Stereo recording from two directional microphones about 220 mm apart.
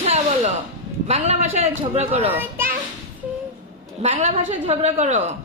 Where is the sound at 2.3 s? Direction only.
10° right (ahead or behind).